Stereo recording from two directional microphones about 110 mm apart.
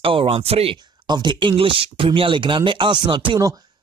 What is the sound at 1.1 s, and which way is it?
Speech, 45° right (ahead or behind).